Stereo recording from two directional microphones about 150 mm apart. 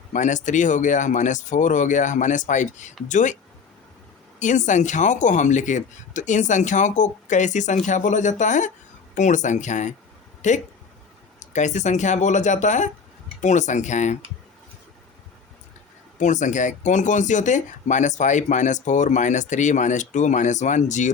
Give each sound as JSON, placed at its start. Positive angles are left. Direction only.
{"t": 0.1, "sound": "speech", "side_deg": 55}
{"t": 4.4, "sound": "speech", "side_deg": 55}
{"t": 16.1, "sound": "speech", "side_deg": 55}